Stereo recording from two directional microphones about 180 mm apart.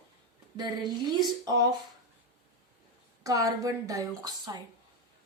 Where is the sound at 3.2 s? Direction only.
20° right (ahead or behind).